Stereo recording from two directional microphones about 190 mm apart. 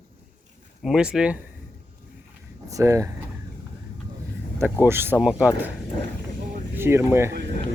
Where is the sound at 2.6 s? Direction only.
15° right (ahead or behind).